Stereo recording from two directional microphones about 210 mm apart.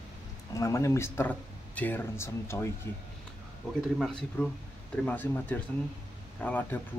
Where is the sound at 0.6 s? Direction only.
15° left (ahead or behind).